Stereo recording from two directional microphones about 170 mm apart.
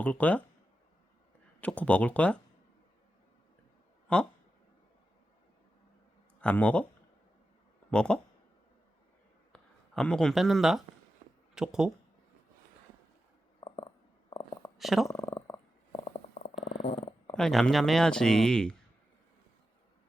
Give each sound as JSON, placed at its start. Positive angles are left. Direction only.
{"t": 0.0, "sound": "speech", "side_deg": 10}
{"t": 1.6, "sound": "speech", "side_deg": 10}
{"t": 4.1, "sound": "speech", "side_deg": 5}
{"t": 6.4, "sound": "speech", "side_deg": 10}
{"t": 7.9, "sound": "speech", "side_deg": 5}
{"t": 9.5, "sound": "speech", "side_deg": 5}
{"t": 13.6, "sound": "stomach rumble", "side_deg": 30}
{"t": 14.8, "sound": "speech", "side_deg": 0}
{"t": 15.0, "sound": "purr", "side_deg": 15}
{"t": 17.0, "sound": "a sound", "side_deg": 25}
{"t": 17.3, "sound": "speech", "side_deg": 5}